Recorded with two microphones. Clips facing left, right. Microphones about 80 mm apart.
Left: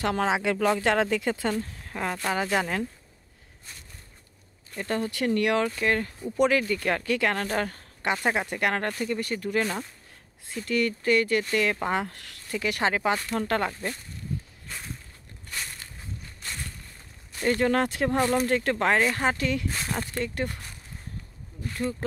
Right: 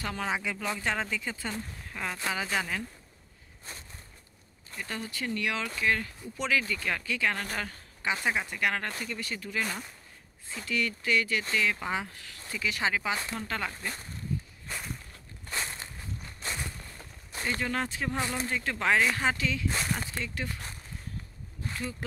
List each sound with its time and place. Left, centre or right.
0.0 s speech: left
1.9 s speech: left
4.7 s speech: left
5.1 s speech: left
5.8 s speech: left
8.7 s speech: left
10.7 s speech: left
15.5 s walk: right
17.5 s speech: left
18.1 s speech: left
18.7 s speech: left
19.7 s speech: centre